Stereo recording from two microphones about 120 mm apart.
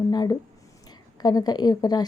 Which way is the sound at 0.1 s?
35° left (ahead or behind).